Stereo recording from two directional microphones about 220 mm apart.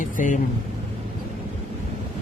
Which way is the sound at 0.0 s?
35° left (ahead or behind).